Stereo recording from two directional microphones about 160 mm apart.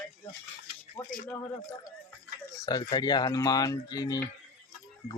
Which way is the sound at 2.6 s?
25° left (ahead or behind).